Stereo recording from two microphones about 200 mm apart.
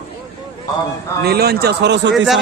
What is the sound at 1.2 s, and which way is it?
Speech, 50° right (ahead or behind).